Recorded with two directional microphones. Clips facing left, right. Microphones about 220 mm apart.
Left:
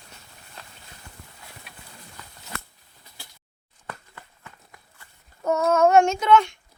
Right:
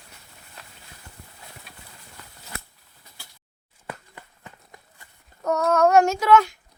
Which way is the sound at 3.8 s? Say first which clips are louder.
Right 2 dB; 15° right (ahead or behind).